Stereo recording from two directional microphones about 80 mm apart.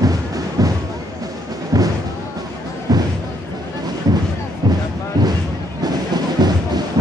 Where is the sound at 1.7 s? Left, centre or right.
Right.